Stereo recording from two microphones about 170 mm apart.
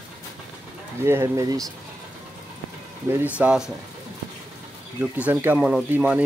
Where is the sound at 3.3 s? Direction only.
5° right (ahead or behind).